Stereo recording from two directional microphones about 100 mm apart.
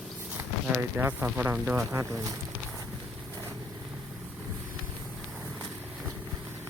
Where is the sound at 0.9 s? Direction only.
15° right (ahead or behind).